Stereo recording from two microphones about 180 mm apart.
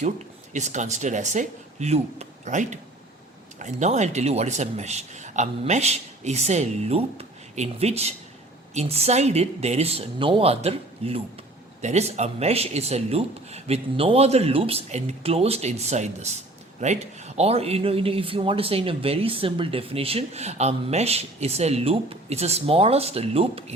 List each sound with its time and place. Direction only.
0.5 s a man's voice: 40° right (ahead or behind)